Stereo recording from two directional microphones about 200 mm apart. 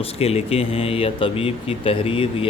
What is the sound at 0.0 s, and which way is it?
Speech, 30° left (ahead or behind).